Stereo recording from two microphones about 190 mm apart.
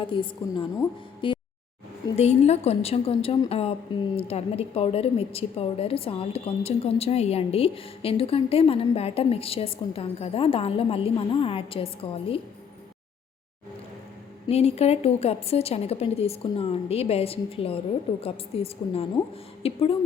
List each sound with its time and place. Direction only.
0.1 s a woman's voice: 25° left (ahead or behind)
1.2 s a sound: 25° left (ahead or behind)
2.1 s a woman's voice: 35° left (ahead or behind)
14.4 s a woman's voice: 35° left (ahead or behind)